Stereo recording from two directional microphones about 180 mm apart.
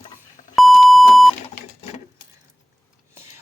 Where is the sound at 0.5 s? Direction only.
Centre (ahead or behind).